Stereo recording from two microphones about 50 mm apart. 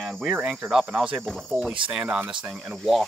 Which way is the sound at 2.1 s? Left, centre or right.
Right.